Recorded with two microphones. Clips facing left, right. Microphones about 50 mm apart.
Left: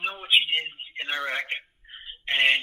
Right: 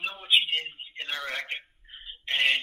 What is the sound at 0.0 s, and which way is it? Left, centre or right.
Telephone, centre.